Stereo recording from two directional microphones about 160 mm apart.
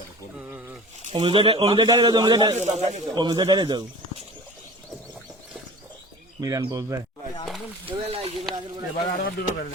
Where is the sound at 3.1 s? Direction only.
25° right (ahead or behind).